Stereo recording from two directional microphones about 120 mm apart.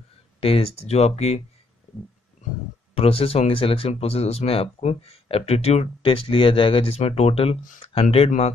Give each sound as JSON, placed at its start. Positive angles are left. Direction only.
{"t": 0.4, "sound": "speech", "side_deg": 55}
{"t": 2.9, "sound": "speech", "side_deg": 55}